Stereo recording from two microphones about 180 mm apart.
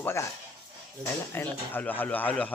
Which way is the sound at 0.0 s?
15° left (ahead or behind).